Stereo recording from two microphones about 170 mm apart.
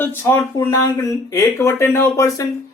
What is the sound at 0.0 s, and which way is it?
Speech, 10° left (ahead or behind).